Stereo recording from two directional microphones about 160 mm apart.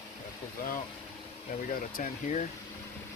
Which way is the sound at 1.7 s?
50° left (ahead or behind).